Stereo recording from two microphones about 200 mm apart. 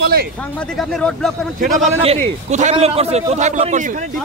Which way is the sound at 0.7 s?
Centre (ahead or behind).